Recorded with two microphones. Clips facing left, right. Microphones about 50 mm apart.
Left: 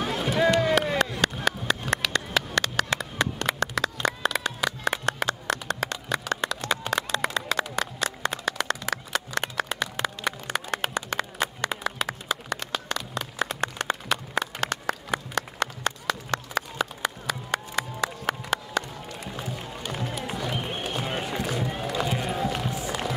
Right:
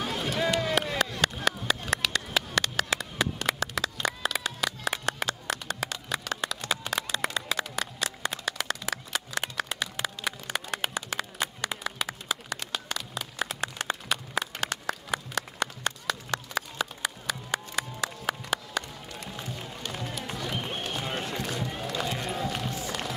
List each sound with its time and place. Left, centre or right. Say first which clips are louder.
0.0 s a sound: left 5 dB; centre
18.7 s run: left 4 dB; centre
22.8 s music: left 3 dB; centre